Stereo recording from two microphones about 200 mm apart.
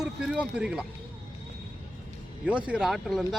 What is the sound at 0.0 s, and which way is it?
Speech, 5° right (ahead or behind).